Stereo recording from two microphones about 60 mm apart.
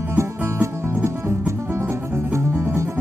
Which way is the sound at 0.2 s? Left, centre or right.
Right.